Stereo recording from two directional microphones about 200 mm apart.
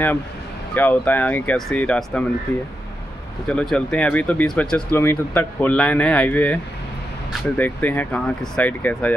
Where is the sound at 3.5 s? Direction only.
Centre (ahead or behind).